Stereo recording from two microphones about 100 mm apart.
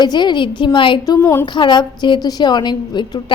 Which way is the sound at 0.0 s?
45° left (ahead or behind).